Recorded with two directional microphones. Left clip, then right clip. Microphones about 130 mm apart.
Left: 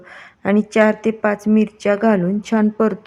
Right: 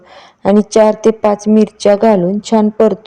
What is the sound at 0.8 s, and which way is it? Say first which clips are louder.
A woman's voice: right 6 dB; 30° right (ahead or behind).